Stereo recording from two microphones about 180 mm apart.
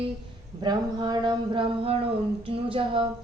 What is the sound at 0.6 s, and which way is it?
Speech, 25° right (ahead or behind).